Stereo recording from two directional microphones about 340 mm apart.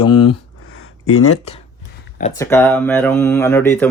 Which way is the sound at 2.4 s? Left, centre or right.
Centre.